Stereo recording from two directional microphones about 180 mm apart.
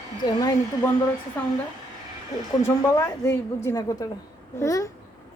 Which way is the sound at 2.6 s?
15° left (ahead or behind).